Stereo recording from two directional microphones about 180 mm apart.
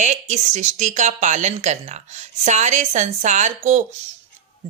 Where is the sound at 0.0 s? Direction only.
40° right (ahead or behind).